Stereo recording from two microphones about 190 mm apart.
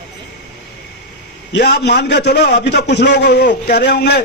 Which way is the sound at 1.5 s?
65° left (ahead or behind).